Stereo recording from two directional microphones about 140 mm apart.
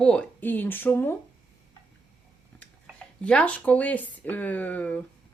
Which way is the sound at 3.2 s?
10° left (ahead or behind).